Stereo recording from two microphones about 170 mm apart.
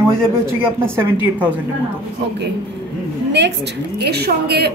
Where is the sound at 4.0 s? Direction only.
70° right (ahead or behind).